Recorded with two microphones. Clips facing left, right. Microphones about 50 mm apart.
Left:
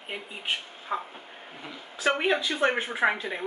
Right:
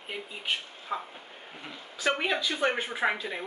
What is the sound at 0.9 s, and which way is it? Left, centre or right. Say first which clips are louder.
Speech: left 3 dB; left.